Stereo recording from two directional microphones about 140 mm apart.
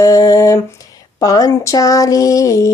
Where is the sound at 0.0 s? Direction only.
25° left (ahead or behind).